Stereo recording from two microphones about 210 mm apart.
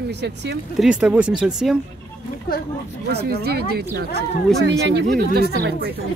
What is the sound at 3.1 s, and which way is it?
Speech, 50° right (ahead or behind).